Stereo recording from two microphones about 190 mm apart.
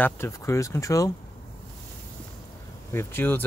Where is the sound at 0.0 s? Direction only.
15° left (ahead or behind).